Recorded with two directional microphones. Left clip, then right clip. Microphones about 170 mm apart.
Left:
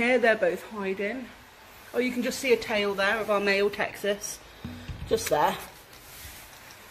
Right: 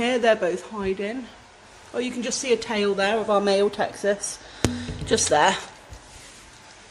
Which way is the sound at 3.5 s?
20° right (ahead or behind).